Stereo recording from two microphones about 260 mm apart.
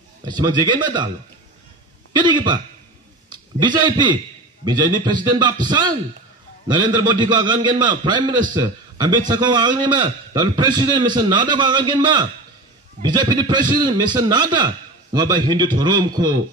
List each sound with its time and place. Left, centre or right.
0.4 s a man's voice: centre
2.1 s a man's voice: centre